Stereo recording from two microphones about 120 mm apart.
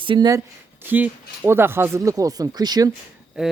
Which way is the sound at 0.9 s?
15° right (ahead or behind).